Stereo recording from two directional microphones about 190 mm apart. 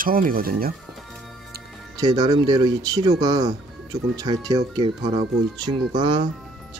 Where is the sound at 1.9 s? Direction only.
20° right (ahead or behind).